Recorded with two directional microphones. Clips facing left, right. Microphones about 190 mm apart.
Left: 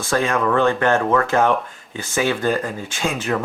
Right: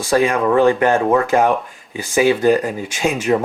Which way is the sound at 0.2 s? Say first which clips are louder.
Right 4 dB; 10° right (ahead or behind).